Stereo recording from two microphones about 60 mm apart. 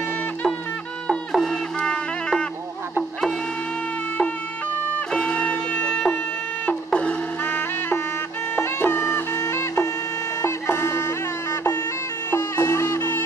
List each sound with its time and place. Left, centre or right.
1.0 s music: centre
1.8 s music: centre
5.1 s music: centre
6.6 s printer: left
7.4 s music: left
9.4 s music: left
12.3 s music: left